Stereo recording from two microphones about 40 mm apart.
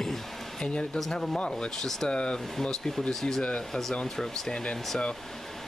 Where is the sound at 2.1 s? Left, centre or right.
Left.